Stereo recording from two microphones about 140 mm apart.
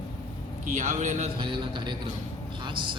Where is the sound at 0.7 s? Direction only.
60° right (ahead or behind).